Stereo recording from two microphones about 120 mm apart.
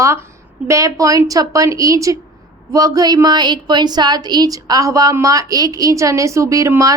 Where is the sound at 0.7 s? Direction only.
25° right (ahead or behind).